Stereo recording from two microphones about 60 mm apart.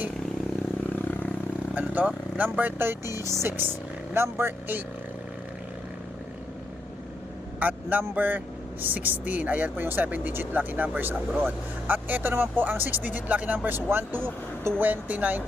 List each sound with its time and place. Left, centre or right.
0.9 s vehicle: left
1.9 s speech: right
3.2 s speech: right
3.6 s speech: right
7.6 s speech: right
13.7 s speech: right